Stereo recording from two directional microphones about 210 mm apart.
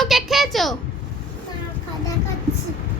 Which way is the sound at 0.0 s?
Centre (ahead or behind).